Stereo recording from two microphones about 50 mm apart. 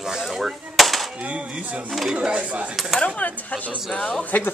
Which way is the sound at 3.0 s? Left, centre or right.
Left.